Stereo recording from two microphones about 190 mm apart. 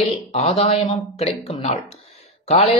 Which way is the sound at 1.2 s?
35° left (ahead or behind).